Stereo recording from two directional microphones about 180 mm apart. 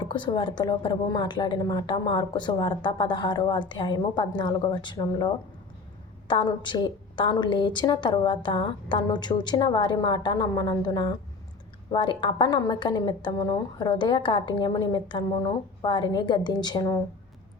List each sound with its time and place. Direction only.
0.0 s a woman's voice: 25° left (ahead or behind)